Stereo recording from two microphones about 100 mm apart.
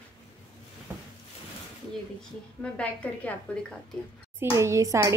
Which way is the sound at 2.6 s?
15° left (ahead or behind).